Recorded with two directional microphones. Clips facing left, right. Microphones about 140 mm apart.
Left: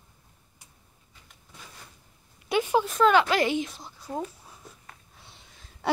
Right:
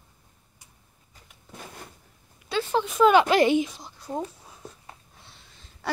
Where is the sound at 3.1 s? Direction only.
20° right (ahead or behind).